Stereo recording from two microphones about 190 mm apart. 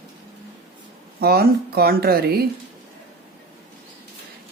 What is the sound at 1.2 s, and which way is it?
Speech, 55° right (ahead or behind).